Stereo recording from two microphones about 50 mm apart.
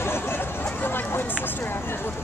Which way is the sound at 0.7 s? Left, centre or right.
Left.